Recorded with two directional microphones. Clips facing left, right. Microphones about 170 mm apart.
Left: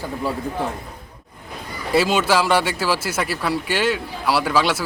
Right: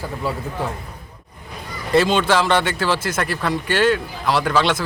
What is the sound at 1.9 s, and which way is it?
Speech, 5° left (ahead or behind).